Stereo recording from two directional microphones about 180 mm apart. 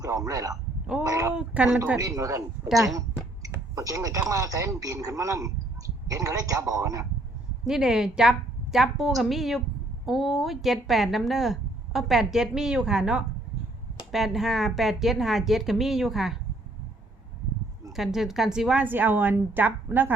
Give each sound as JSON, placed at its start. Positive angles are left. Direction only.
{"t": 0.0, "sound": "a man's voice", "side_deg": -20}
{"t": 0.5, "sound": "a sound", "side_deg": -5}
{"t": 1.0, "sound": "a man's voice", "side_deg": -20}
{"t": 1.3, "sound": "a woman's voice", "side_deg": -5}
{"t": 2.0, "sound": "a woman's voice", "side_deg": -20}
{"t": 7.6, "sound": "speech", "side_deg": -5}
{"t": 17.9, "sound": "a woman's voice", "side_deg": 0}